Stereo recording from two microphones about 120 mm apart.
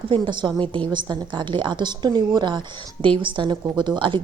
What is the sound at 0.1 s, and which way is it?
A woman's voice, 40° right (ahead or behind).